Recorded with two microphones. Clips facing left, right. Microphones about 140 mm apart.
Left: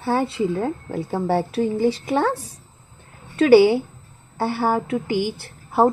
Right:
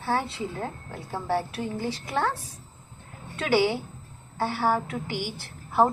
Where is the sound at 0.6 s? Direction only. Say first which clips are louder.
Left 10 dB; 35° left (ahead or behind).